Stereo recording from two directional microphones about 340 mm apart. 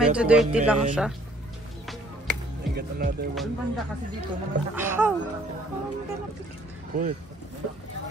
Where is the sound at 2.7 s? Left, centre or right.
Right.